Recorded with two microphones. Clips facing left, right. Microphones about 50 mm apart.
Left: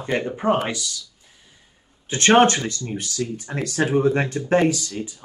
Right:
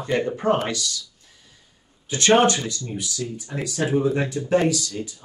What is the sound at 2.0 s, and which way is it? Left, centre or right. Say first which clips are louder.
Speech: left 2 dB; left.